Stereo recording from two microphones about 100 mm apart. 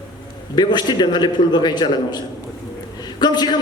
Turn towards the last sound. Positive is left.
turn(degrees=45)  # may be behind; listen again after turning